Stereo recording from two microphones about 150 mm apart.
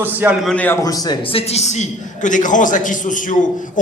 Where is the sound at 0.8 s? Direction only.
25° left (ahead or behind).